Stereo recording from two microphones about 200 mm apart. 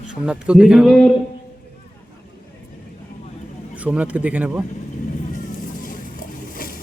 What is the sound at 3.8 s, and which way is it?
Speech, 5° right (ahead or behind).